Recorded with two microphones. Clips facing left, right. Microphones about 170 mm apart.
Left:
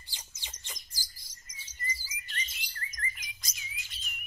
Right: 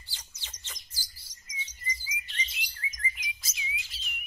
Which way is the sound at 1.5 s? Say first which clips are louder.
Right 10 dB; 50° left (ahead or behind).